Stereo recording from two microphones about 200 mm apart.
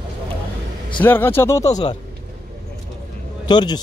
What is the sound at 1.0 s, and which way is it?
Speech, 10° left (ahead or behind).